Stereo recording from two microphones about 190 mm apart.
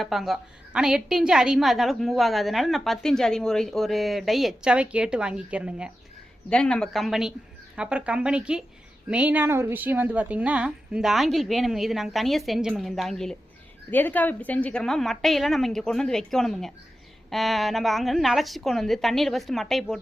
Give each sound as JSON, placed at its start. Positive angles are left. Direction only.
{"t": 0.0, "sound": "a woman's voice", "side_deg": 0}